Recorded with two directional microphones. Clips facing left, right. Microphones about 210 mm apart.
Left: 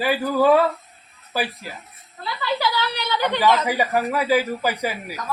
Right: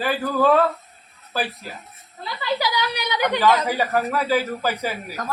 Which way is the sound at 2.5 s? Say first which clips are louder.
Even; 15° right (ahead or behind).